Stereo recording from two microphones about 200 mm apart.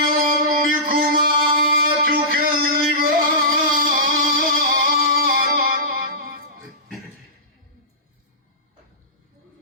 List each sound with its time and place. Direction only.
0.0 s music: 45° right (ahead or behind)